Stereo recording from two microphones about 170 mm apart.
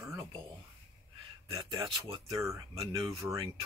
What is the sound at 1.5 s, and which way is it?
Speech, 25° right (ahead or behind).